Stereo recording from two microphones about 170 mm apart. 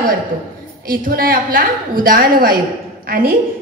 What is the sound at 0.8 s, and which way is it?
A woman's voice, 55° right (ahead or behind).